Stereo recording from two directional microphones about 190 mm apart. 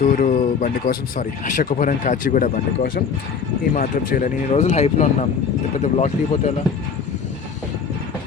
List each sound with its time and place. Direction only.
0.0 s speech: 40° left (ahead or behind)